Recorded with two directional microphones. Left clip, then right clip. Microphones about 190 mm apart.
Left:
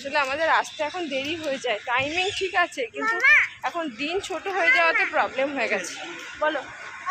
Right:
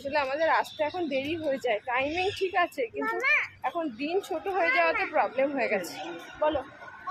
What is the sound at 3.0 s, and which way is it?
Speech, 5° right (ahead or behind).